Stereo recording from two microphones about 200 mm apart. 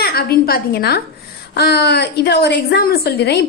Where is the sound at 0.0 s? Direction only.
50° left (ahead or behind).